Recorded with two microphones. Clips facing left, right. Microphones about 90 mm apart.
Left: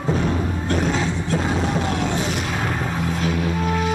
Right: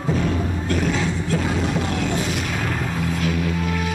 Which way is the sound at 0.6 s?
30° left (ahead or behind).